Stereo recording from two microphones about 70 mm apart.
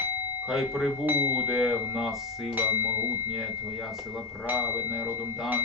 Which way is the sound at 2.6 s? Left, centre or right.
Right.